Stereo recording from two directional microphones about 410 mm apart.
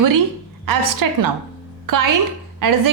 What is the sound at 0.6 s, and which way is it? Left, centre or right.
A woman's voice, right.